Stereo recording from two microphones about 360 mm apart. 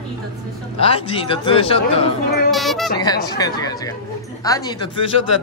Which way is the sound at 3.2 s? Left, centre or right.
Centre.